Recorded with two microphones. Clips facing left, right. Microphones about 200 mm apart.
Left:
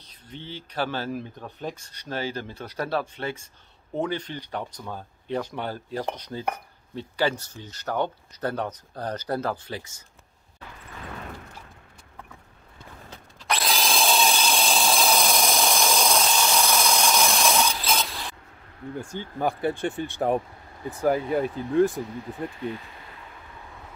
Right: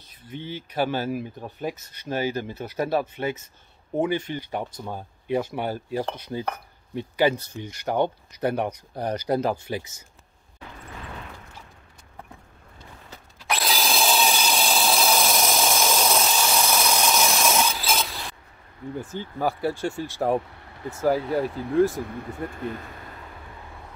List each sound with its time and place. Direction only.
0.3 s speech: 10° right (ahead or behind)
13.4 s wood: centre (ahead or behind)
18.9 s speech: 5° right (ahead or behind)
22.0 s speech: 50° right (ahead or behind)